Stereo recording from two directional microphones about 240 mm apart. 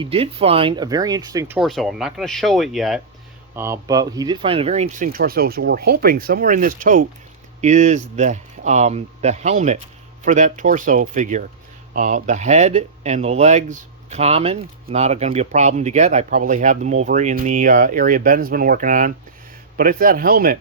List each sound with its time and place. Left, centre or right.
0.0 s speech: right
1.5 s speech: centre
3.5 s speech: centre; by 5.0 s right
5.0 s speech: right